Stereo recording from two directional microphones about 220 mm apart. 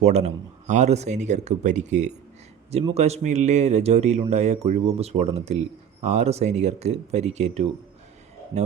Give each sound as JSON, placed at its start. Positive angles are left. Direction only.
{"t": 0.0, "sound": "speech", "side_deg": -30}